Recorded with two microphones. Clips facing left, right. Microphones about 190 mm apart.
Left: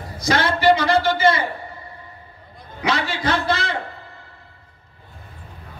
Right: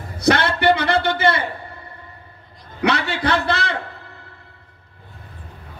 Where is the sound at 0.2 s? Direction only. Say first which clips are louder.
Right 2 dB; 60° right (ahead or behind).